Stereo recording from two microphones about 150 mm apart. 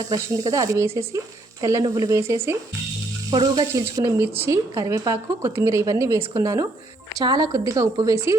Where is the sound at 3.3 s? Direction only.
25° right (ahead or behind).